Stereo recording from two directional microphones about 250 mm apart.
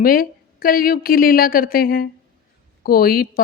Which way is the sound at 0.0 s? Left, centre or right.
Left.